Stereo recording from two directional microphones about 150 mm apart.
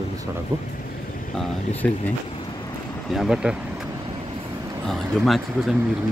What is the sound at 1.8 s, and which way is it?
Speech, 10° left (ahead or behind).